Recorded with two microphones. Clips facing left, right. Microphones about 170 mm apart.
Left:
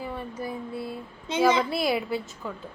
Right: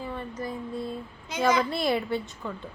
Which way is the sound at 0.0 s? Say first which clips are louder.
Left 1 dB; 10° left (ahead or behind).